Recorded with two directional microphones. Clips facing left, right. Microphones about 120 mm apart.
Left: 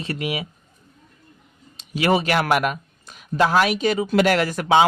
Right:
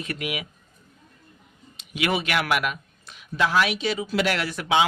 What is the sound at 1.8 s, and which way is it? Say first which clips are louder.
Speech: left 6 dB; 35° left (ahead or behind).